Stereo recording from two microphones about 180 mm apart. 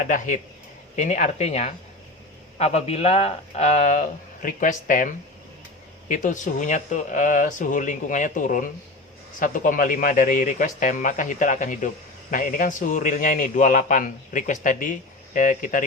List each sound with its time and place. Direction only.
0.0 s a man's voice: 45° left (ahead or behind)